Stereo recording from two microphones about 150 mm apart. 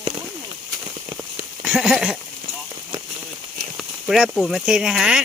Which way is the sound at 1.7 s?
5° right (ahead or behind).